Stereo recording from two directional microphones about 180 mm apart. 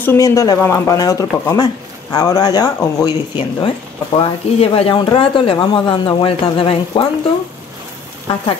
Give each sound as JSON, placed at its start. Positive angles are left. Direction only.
{"t": 0.0, "sound": "speech", "side_deg": 15}